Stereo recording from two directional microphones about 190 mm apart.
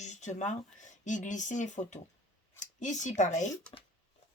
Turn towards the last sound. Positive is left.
turn(degrees=40)  # may be behind; listen again after turning